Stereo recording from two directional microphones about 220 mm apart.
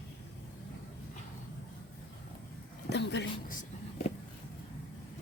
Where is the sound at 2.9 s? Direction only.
50° left (ahead or behind).